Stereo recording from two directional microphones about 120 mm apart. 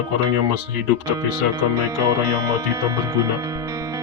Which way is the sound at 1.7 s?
25° right (ahead or behind).